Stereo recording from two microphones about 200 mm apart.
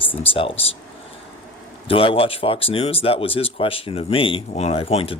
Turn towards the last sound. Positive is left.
turn(degrees=30)  # may be behind; listen again after turning